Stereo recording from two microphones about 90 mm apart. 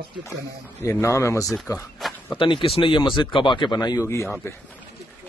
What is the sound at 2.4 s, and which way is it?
Speech, 70° left (ahead or behind).